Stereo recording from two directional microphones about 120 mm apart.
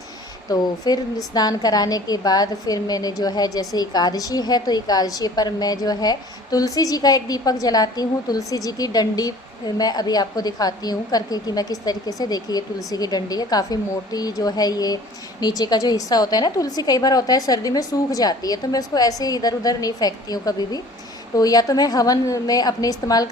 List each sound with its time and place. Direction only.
0.5 s a woman's voice: 30° left (ahead or behind)